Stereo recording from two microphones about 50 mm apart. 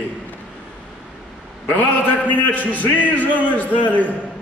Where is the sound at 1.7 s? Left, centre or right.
Left.